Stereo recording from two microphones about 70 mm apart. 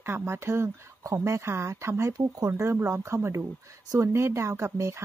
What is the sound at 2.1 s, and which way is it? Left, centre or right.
Speech, right.